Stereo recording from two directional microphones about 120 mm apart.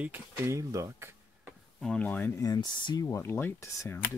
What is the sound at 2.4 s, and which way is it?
Speech, 35° left (ahead or behind).